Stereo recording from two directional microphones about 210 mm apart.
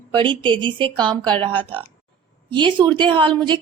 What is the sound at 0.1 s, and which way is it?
A woman's voice, 20° right (ahead or behind).